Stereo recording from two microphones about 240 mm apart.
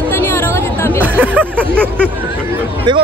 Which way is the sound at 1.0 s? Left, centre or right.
Centre.